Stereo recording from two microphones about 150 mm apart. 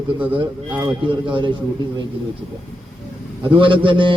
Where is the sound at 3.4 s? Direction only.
35° right (ahead or behind).